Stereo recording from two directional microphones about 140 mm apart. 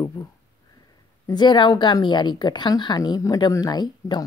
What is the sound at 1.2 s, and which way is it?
Speech, 30° left (ahead or behind).